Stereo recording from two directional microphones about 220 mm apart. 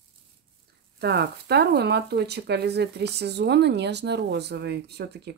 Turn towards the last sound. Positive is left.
turn(degrees=-50)  # may be behind; listen again after turning